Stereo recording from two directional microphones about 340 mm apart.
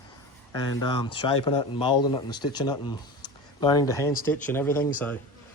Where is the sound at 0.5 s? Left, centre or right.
Centre.